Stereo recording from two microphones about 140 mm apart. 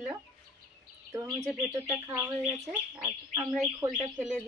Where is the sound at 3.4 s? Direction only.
5° right (ahead or behind).